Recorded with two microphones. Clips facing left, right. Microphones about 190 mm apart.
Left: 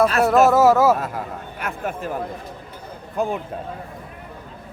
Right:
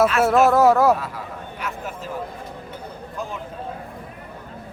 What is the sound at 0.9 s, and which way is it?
Speech, 50° left (ahead or behind).